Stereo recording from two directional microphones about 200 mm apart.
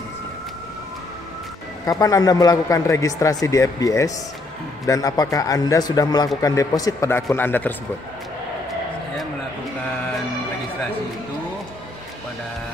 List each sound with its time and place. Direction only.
1.9 s a man's voice: 15° left (ahead or behind)